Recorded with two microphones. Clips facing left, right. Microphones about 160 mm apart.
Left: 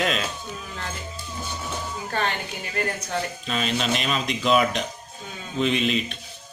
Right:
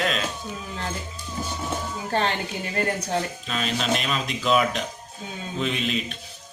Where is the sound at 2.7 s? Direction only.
30° right (ahead or behind).